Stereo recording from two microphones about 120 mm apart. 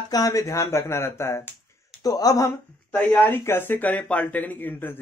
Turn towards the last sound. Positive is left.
turn(degrees=15)  # may be behind; listen again after turning